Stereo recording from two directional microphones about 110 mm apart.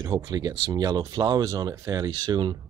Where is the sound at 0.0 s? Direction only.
30° right (ahead or behind).